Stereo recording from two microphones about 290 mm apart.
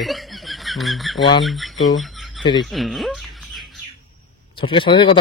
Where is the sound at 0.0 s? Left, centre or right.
Centre.